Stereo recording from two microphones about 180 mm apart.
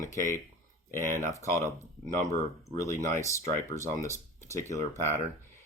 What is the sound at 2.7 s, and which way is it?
Speech, 15° left (ahead or behind).